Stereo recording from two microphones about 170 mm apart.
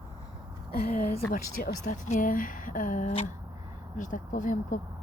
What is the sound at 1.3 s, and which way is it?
A woman's voice, 50° left (ahead or behind).